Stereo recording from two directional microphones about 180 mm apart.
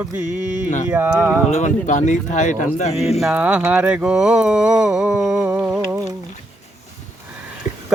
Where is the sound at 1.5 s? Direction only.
40° left (ahead or behind).